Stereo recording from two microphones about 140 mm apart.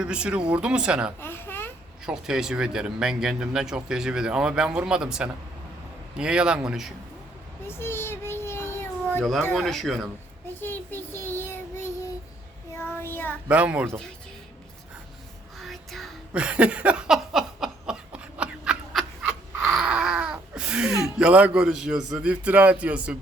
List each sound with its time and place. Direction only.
0.0 s a man's voice: 5° right (ahead or behind)
1.2 s a sound: 15° left (ahead or behind)
2.0 s speech: 5° right (ahead or behind)
7.7 s a sound: 15° left (ahead or behind)
9.6 s speech: centre (ahead or behind)
10.6 s child singing: 15° left (ahead or behind)
13.5 s a man's voice: 10° right (ahead or behind)
15.5 s a sound: centre (ahead or behind)
21.0 s a man's voice: 5° right (ahead or behind)